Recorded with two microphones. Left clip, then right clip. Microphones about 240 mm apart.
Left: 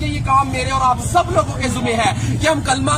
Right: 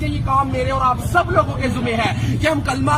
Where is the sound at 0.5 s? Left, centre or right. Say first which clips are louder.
Left 1 dB; centre.